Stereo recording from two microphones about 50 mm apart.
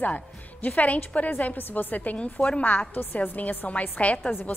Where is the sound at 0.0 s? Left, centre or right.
Left.